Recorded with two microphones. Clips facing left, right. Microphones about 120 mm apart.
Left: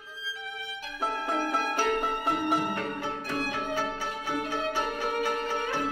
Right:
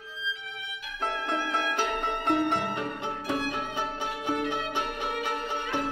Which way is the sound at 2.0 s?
5° left (ahead or behind).